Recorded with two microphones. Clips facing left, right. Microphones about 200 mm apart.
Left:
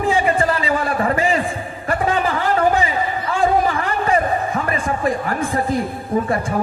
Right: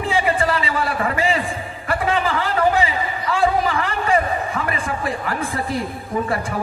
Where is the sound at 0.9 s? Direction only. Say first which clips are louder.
Left 3 dB; 35° left (ahead or behind).